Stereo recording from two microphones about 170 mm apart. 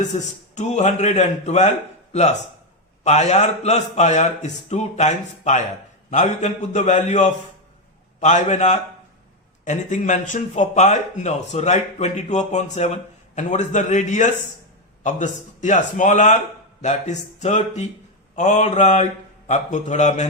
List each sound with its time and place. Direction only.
0.0 s a man's voice: 45° left (ahead or behind)